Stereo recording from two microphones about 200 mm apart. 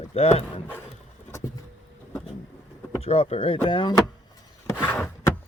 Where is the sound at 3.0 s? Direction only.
30° left (ahead or behind).